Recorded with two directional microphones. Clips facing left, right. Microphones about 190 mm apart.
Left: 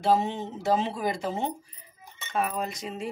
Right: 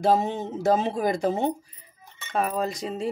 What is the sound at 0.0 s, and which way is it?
Speech, 45° right (ahead or behind).